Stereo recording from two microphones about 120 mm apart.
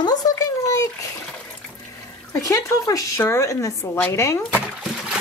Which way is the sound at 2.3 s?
25° left (ahead or behind).